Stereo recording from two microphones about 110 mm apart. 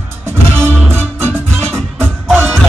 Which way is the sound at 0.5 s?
20° right (ahead or behind).